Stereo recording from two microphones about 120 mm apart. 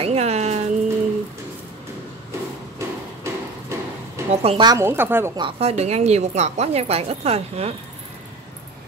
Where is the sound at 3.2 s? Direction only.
25° right (ahead or behind).